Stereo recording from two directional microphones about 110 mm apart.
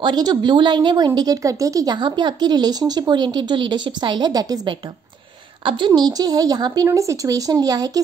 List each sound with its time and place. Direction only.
0.0 s a woman's voice: 40° right (ahead or behind)
5.6 s a woman's voice: 45° right (ahead or behind)